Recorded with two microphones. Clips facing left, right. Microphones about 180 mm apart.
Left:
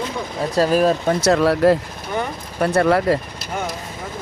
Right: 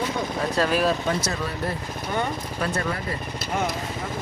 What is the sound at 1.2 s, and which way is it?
Speech, 75° left (ahead or behind).